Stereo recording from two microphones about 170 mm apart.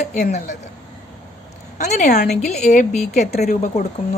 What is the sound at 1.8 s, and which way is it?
A woman's voice, 45° left (ahead or behind).